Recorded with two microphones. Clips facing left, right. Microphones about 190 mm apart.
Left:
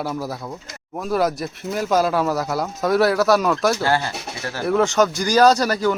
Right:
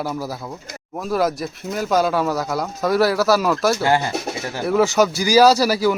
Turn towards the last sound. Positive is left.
turn(degrees=-5)  # may be behind; listen again after turning